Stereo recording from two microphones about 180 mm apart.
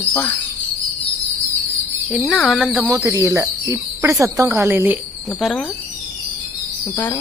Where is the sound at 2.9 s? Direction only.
15° right (ahead or behind).